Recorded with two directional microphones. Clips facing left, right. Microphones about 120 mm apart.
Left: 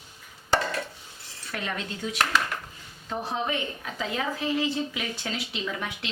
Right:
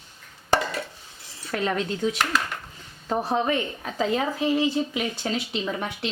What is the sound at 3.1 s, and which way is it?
Speech, 40° right (ahead or behind).